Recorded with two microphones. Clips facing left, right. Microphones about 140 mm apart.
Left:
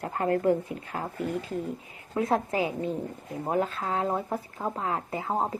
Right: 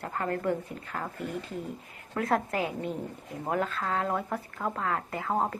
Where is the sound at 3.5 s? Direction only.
35° left (ahead or behind); by 5.6 s 15° left (ahead or behind).